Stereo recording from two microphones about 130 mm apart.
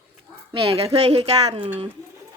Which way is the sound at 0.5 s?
45° right (ahead or behind).